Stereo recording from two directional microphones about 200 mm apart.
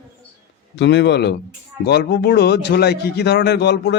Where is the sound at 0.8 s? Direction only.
60° left (ahead or behind).